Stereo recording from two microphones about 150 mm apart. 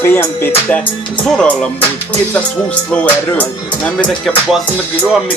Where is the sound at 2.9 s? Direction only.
10° left (ahead or behind).